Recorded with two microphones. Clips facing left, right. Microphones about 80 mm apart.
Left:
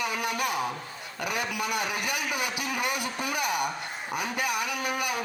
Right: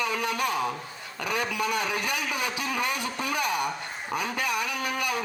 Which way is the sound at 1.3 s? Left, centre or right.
Right.